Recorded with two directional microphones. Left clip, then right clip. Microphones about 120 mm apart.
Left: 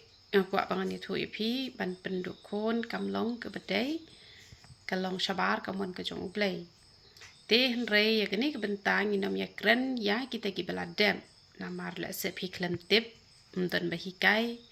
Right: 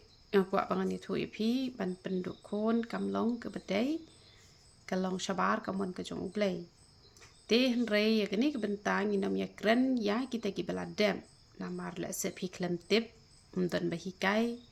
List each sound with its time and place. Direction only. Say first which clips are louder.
0.3 s a woman's voice: left 1 dB; 40° right (ahead or behind)